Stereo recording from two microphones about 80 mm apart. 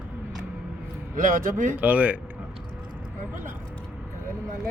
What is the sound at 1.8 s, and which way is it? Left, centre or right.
Speech, centre.